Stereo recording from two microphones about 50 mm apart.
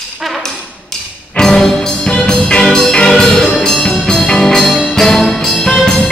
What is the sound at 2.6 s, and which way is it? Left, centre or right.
Music, centre.